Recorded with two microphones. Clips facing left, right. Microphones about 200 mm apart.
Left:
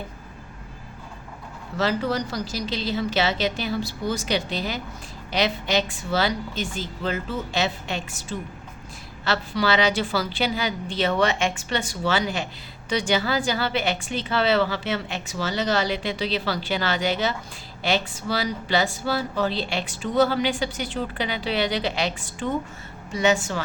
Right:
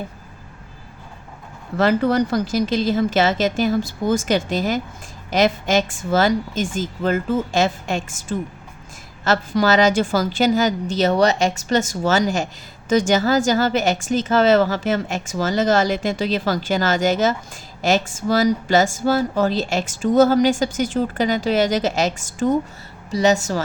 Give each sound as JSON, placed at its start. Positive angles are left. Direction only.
{"t": 1.7, "sound": "a woman's voice", "side_deg": -55}